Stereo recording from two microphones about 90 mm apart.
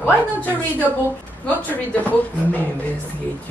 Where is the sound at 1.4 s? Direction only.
15° left (ahead or behind).